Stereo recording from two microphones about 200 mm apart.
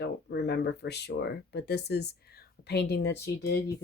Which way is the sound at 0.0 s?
55° left (ahead or behind).